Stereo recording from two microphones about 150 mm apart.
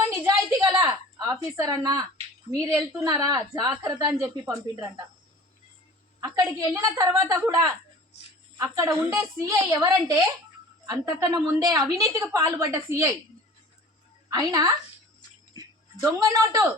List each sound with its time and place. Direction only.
0.0 s a sound: 15° right (ahead or behind)
2.5 s a woman's voice: 5° right (ahead or behind)
3.0 s a woman's voice: 25° right (ahead or behind)
6.1 s a woman's voice: 20° right (ahead or behind)
8.1 s a woman's voice: 45° left (ahead or behind)
8.5 s a woman's voice: 20° right (ahead or behind)
14.3 s a woman's voice: 25° right (ahead or behind)